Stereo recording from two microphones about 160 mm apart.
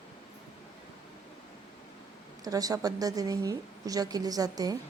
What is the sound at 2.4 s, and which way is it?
A woman's voice, 20° right (ahead or behind).